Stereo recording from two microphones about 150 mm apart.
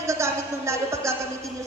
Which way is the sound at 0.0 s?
20° right (ahead or behind).